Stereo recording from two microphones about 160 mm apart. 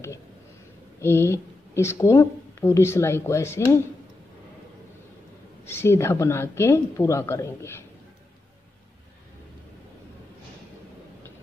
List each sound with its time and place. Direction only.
1.0 s speech: 15° left (ahead or behind)
5.7 s speech: 15° left (ahead or behind)